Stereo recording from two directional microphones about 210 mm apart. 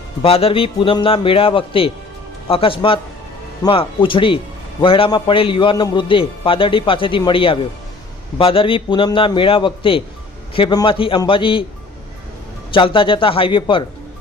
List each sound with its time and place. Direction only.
0.2 s a man's voice: 30° left (ahead or behind)
12.7 s a man's voice: 25° left (ahead or behind)